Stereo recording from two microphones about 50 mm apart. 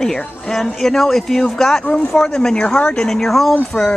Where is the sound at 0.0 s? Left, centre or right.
Centre.